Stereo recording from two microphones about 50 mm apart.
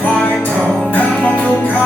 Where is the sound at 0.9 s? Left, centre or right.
Left.